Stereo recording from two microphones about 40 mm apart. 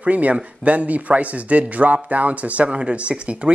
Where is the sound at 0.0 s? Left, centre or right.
Right.